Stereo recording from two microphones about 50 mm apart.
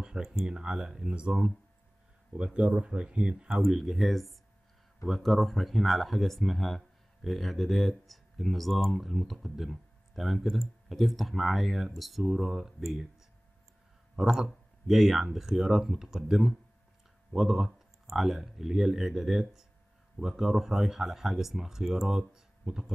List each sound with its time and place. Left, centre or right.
0.0 s speech: centre
3.6 s speech: centre
14.1 s speech: centre